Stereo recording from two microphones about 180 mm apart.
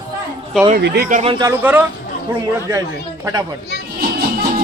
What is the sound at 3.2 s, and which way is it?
Speech, 20° right (ahead or behind).